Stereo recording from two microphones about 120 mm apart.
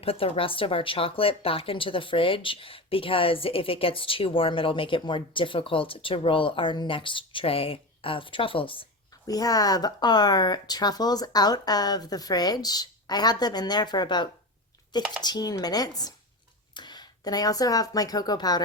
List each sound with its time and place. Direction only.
0.0 s speech: 50° left (ahead or behind)
9.2 s speech: 30° left (ahead or behind)